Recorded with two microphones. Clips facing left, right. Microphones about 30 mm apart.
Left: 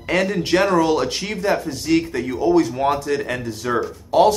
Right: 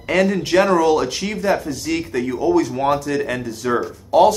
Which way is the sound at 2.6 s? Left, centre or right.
Centre.